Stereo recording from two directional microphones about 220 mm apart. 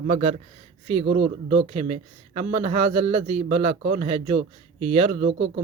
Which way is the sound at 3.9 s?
25° right (ahead or behind).